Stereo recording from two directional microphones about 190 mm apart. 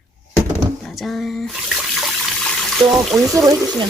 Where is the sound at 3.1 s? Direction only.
15° right (ahead or behind).